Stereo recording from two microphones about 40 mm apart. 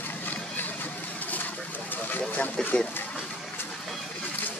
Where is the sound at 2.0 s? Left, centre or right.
Left.